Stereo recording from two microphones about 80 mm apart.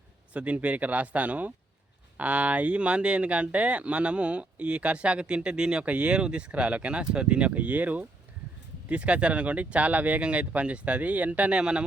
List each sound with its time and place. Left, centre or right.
0.3 s speech: centre